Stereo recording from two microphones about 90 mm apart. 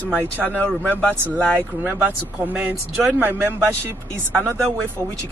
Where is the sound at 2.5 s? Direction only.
15° right (ahead or behind).